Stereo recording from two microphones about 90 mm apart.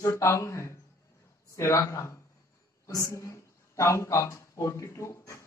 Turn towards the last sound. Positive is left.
turn(degrees=30)  # may be behind; listen again after turning